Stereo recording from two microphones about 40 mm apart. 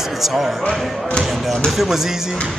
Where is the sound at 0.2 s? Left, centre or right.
Centre.